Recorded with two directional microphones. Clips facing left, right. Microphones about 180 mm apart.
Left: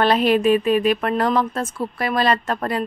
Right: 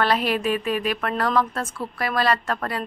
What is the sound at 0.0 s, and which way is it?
Speech, 20° left (ahead or behind).